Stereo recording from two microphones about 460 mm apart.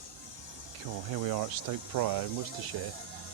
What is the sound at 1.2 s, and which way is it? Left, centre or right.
Speech, right.